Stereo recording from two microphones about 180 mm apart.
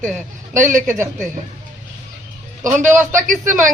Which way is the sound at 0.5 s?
45° right (ahead or behind).